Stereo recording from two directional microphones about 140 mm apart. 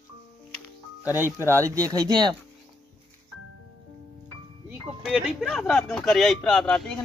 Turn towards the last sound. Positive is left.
turn(degrees=5)  # may be behind; listen again after turning